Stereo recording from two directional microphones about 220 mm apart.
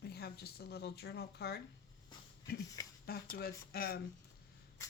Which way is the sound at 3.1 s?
45° left (ahead or behind).